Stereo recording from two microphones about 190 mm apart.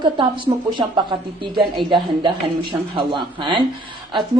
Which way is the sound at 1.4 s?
25° right (ahead or behind).